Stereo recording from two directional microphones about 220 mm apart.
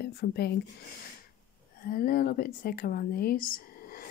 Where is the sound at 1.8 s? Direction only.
40° left (ahead or behind).